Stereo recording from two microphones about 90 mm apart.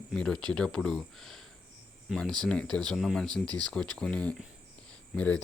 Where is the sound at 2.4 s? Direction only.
10° left (ahead or behind).